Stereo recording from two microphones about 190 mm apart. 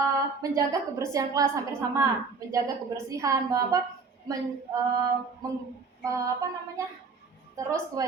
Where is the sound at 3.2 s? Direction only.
20° right (ahead or behind).